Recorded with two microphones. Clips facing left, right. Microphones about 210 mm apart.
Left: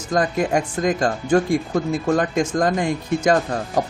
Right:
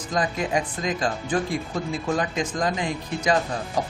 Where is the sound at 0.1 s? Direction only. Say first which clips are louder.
Left 5 dB; 50° left (ahead or behind).